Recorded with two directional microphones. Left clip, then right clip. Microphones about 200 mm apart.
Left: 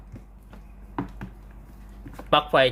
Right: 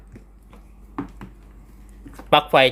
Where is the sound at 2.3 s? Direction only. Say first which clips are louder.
Right 4 dB; 25° right (ahead or behind).